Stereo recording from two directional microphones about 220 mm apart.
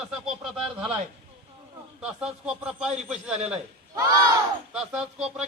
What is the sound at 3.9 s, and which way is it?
Speech, 15° right (ahead or behind).